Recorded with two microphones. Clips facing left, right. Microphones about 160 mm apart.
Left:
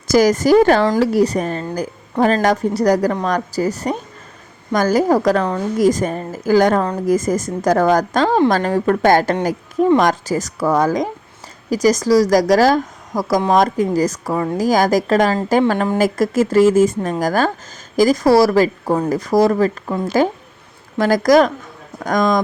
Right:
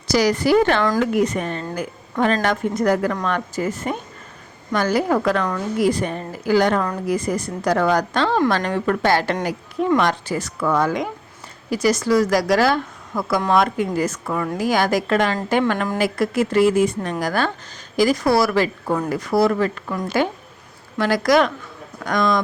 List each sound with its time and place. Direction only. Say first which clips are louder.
0.1 s a woman's voice: left 5 dB; 45° left (ahead or behind)